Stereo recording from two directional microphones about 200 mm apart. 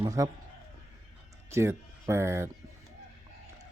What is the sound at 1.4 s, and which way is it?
Speech, 15° right (ahead or behind).